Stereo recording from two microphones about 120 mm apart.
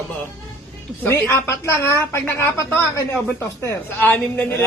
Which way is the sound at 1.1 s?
20° left (ahead or behind).